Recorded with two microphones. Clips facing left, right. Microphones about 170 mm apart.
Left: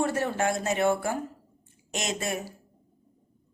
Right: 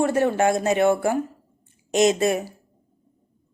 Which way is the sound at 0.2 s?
60° right (ahead or behind).